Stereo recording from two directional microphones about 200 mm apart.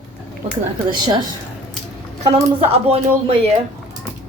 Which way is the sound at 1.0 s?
20° right (ahead or behind).